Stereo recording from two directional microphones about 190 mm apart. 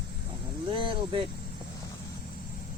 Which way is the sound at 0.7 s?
25° right (ahead or behind).